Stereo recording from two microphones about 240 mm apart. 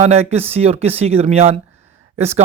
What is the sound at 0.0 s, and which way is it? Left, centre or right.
Speech, right.